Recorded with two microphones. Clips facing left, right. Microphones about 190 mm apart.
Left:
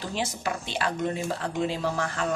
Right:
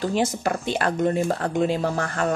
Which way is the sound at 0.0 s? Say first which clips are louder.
Right 8 dB; 50° right (ahead or behind).